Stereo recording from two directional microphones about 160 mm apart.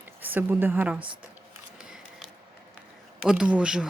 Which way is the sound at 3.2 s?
5° right (ahead or behind).